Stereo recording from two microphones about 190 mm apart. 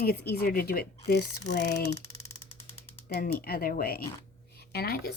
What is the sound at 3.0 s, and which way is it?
Speech, 55° left (ahead or behind).